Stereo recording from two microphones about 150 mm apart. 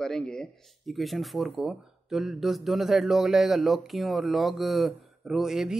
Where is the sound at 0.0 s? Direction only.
5° left (ahead or behind).